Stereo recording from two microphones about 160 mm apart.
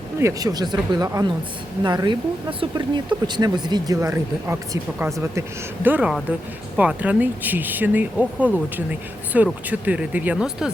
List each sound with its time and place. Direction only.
0.2 s speech: 20° right (ahead or behind)